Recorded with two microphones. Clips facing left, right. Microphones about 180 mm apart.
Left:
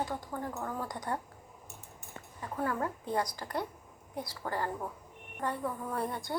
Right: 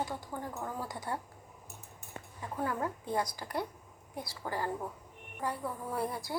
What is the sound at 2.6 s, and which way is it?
A woman's voice, 15° right (ahead or behind).